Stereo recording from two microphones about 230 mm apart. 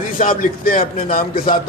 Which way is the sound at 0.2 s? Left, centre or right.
Left.